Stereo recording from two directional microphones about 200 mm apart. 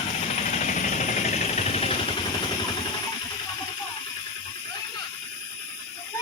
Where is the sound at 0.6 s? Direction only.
40° left (ahead or behind).